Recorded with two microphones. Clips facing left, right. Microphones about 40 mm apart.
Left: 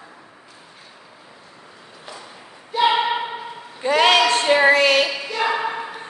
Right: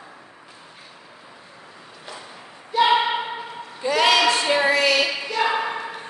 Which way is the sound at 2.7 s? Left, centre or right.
Centre.